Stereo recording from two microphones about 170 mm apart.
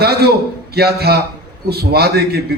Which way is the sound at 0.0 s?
70° right (ahead or behind).